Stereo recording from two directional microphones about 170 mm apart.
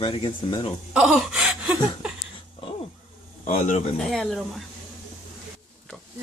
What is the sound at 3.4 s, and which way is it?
Speech, 50° left (ahead or behind).